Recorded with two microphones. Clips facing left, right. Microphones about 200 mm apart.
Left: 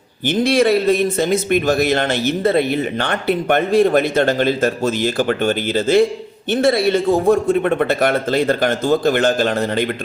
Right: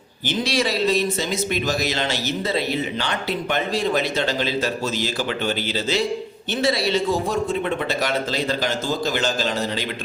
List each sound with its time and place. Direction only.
0.3 s speech: 55° left (ahead or behind)